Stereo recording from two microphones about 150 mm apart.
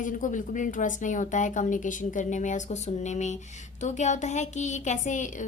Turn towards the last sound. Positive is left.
turn(degrees=55)  # may be behind; listen again after turning